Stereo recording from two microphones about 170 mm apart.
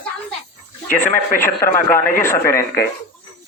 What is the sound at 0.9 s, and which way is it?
Speech, 50° left (ahead or behind).